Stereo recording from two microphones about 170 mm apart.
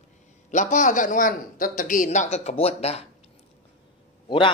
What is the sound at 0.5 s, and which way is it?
A man's voice, 45° left (ahead or behind).